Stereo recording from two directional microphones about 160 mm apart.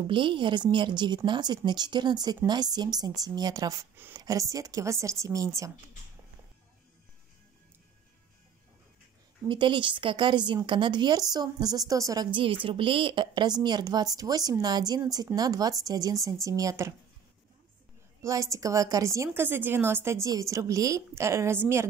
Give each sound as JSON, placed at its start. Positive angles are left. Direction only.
{"t": 0.1, "sound": "a woman's voice", "side_deg": -30}
{"t": 9.5, "sound": "a woman's voice", "side_deg": -30}
{"t": 18.2, "sound": "a woman's voice", "side_deg": -20}